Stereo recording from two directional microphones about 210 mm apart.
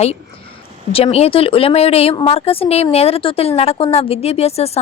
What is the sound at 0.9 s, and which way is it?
A woman's voice, 30° left (ahead or behind).